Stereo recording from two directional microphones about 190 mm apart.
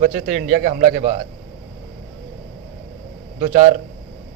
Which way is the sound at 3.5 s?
45° right (ahead or behind).